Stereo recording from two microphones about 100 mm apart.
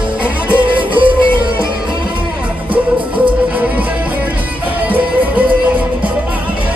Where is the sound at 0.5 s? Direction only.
55° right (ahead or behind).